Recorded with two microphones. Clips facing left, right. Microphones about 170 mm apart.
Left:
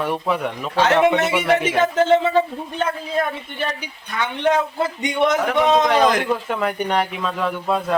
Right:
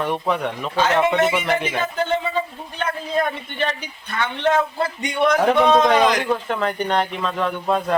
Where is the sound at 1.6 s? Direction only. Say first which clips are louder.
Left 6 dB; 85° left.